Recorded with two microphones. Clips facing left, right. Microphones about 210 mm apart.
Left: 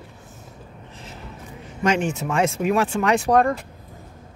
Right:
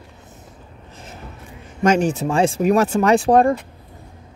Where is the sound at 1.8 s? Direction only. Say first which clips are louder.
Right 5 dB; 40° right (ahead or behind).